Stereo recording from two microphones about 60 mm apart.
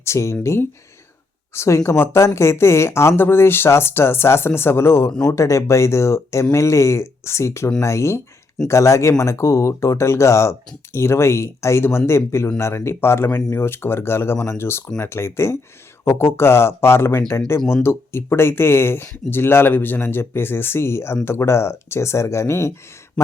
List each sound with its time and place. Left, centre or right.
0.0 s speech: left
5.3 s speech: left